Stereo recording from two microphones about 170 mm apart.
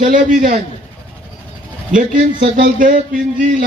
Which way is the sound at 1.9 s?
50° right (ahead or behind).